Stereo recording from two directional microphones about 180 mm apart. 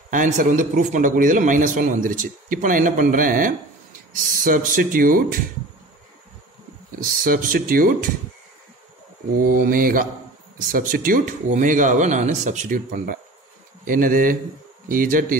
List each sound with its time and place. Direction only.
0.1 s a man's voice: 45° right (ahead or behind)
7.0 s a man's voice: 55° right (ahead or behind)
9.4 s a man's voice: 50° right (ahead or behind)